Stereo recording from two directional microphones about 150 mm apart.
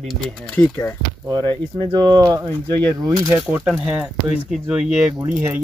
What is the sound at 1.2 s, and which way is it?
Speech, 25° right (ahead or behind).